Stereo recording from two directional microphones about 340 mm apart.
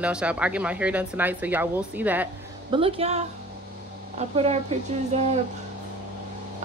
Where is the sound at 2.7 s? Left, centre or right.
Centre.